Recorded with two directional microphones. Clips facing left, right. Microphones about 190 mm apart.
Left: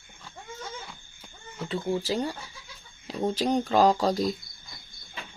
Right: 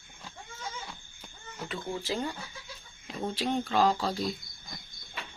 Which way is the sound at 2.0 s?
40° left (ahead or behind).